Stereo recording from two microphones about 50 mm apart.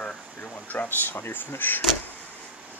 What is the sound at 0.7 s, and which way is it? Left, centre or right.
Speech, left.